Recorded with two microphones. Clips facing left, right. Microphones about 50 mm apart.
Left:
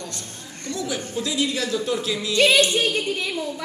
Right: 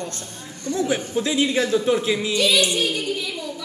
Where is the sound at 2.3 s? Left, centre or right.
Left.